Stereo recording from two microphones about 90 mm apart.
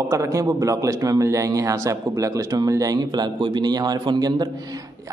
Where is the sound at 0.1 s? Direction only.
35° right (ahead or behind).